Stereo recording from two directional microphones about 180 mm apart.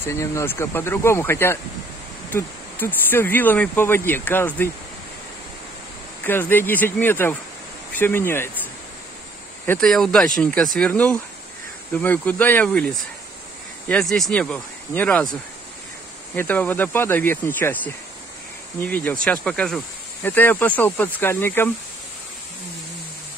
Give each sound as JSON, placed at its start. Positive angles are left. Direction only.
{"t": 0.0, "sound": "speech", "side_deg": 15}
{"t": 6.2, "sound": "speech", "side_deg": 10}
{"t": 9.7, "sound": "speech", "side_deg": 5}
{"t": 16.3, "sound": "speech", "side_deg": 10}